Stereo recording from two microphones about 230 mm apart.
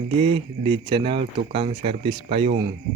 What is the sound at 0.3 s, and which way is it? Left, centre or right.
Speech, right.